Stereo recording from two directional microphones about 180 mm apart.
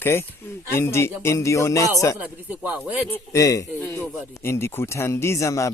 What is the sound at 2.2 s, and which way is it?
Speech, 10° right (ahead or behind).